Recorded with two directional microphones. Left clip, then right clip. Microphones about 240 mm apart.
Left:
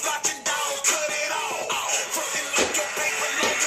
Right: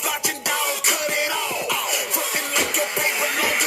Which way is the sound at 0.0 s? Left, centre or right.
Right.